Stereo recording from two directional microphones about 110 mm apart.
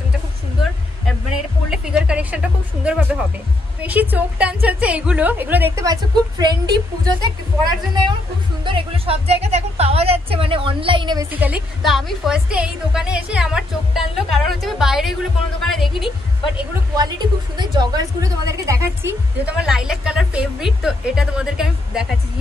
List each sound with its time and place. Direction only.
1.7 s music: 5° right (ahead or behind)
3.8 s a woman's voice: 15° right (ahead or behind)
6.4 s a woman's voice: 40° right (ahead or behind)
8.6 s speech: 55° right (ahead or behind)
11.3 s a woman's voice: 15° right (ahead or behind)
11.8 s speech: centre (ahead or behind)
16.9 s a woman's voice: 40° right (ahead or behind)
19.4 s a woman's voice: 5° right (ahead or behind)